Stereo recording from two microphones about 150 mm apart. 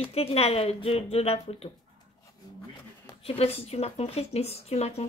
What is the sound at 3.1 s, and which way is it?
Speech, 40° left (ahead or behind).